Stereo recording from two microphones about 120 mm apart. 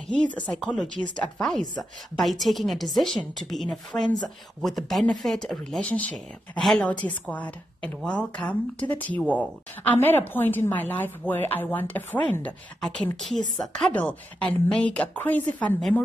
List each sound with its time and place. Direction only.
0.0 s a woman's voice: 5° left (ahead or behind)